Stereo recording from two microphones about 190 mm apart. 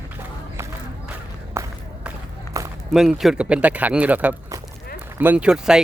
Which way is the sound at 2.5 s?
15° right (ahead or behind).